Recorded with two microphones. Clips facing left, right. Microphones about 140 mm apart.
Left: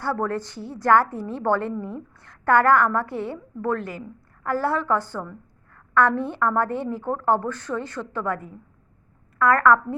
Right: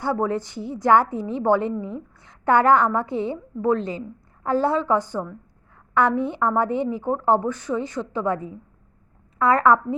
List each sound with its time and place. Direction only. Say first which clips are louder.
0.0 s a woman's voice: right 2 dB; 15° right (ahead or behind)